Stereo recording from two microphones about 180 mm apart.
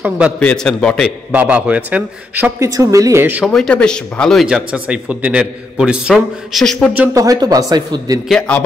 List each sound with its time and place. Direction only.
0.4 s speech: 5° left (ahead or behind)
1.3 s a man's voice: 10° right (ahead or behind)
7.0 s a man's voice: 20° right (ahead or behind)
8.3 s a man's voice: 5° left (ahead or behind)